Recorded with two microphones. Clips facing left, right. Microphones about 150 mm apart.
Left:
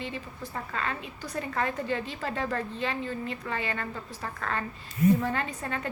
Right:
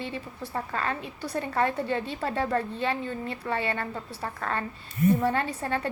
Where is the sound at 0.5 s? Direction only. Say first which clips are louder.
Right 3 dB; 40° right (ahead or behind).